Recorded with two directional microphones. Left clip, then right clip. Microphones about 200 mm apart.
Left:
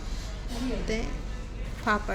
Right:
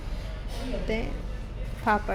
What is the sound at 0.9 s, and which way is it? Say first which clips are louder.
Speech: right 3 dB; 10° right (ahead or behind).